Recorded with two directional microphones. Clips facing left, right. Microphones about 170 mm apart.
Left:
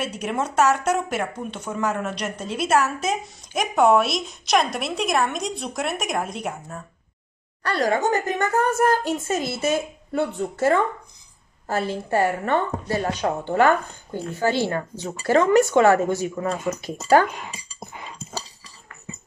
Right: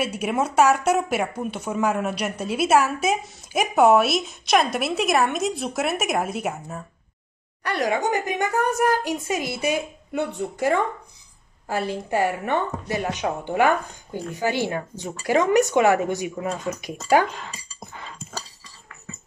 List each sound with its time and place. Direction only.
0.0 s speech: 10° right (ahead or behind)
7.6 s speech: 15° right (ahead or behind)
17.3 s speech: 15° left (ahead or behind)
17.7 s dog: 20° left (ahead or behind)